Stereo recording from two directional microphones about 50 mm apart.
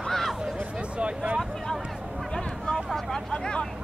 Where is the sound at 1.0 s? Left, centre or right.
Right.